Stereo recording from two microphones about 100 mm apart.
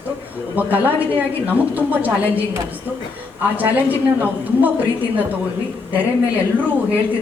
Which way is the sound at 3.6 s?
15° right (ahead or behind).